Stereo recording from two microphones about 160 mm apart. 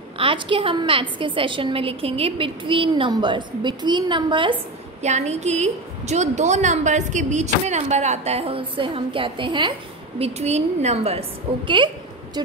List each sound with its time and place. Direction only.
0.2 s a woman's voice: 35° right (ahead or behind)
5.0 s a woman's voice: 45° right (ahead or behind)